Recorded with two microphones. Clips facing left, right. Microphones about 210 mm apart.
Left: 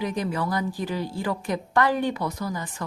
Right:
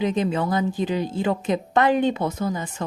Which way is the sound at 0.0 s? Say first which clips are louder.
Right 5 dB; 20° right (ahead or behind).